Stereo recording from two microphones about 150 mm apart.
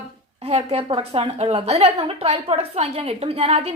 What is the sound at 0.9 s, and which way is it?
A woman's voice, 35° right (ahead or behind).